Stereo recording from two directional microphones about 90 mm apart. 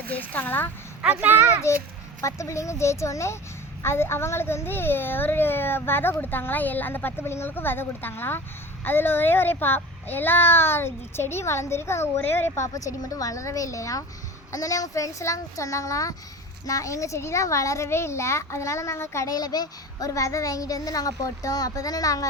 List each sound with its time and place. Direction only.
0.0 s a child's voice: 20° left (ahead or behind)
1.0 s speech: 20° right (ahead or behind)
1.7 s a child's voice: 30° left (ahead or behind)